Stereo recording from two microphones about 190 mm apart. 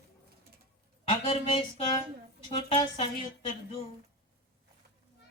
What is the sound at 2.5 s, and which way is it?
Speech, 30° left (ahead or behind).